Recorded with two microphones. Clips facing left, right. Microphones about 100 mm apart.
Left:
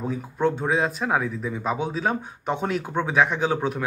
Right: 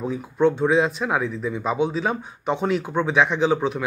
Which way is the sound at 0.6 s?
40° left (ahead or behind).